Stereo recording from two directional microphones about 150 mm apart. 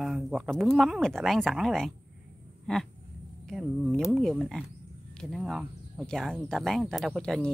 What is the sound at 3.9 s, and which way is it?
Speech, centre (ahead or behind).